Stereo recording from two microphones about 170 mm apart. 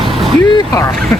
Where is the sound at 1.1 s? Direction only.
15° left (ahead or behind).